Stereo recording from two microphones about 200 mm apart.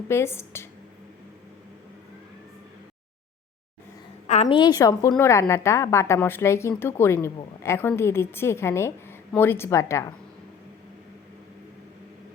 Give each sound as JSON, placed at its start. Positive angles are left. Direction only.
{"t": 0.1, "sound": "speech", "side_deg": 10}
{"t": 4.3, "sound": "a woman's voice", "side_deg": 30}